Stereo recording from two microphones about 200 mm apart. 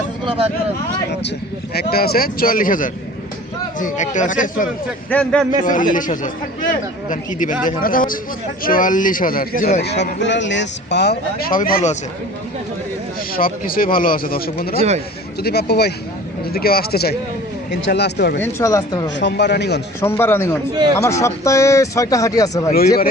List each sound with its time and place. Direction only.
0.3 s speech: 30° right (ahead or behind)
1.7 s speech: 50° left (ahead or behind)
5.0 s speech: 5° left (ahead or behind)
5.6 s speech: 40° left (ahead or behind)
9.8 s speech: 55° left (ahead or behind); by 11.9 s 40° left (ahead or behind)
13.3 s speech: 45° left (ahead or behind)
14.8 s speech: 35° right (ahead or behind)
15.4 s speech: 55° left (ahead or behind)
18.4 s speech: 15° left (ahead or behind)
19.1 s speech: 60° left (ahead or behind)
20.0 s speech: 10° left (ahead or behind)